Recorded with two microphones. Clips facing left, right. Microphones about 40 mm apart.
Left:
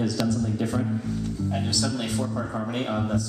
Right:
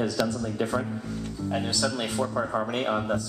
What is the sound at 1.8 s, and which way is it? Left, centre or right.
A man's voice, right.